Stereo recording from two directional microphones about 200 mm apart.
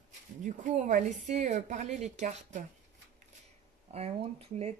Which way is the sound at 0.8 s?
35° right (ahead or behind).